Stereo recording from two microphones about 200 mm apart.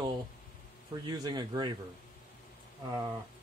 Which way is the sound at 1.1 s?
20° right (ahead or behind).